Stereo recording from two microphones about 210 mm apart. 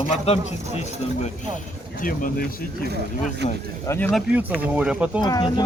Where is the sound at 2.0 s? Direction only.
40° left (ahead or behind).